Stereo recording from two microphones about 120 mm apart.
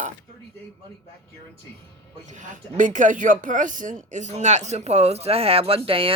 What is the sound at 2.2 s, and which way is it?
Speech, 90° right.